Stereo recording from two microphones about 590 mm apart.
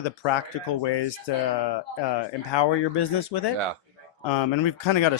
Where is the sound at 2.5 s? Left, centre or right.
Left.